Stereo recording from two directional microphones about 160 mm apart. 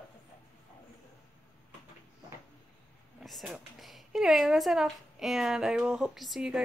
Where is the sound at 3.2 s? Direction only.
Centre (ahead or behind).